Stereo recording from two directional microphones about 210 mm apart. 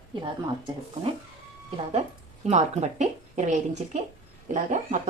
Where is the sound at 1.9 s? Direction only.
30° right (ahead or behind).